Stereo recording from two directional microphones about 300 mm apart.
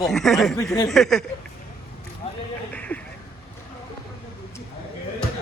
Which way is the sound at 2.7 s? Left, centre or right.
Centre.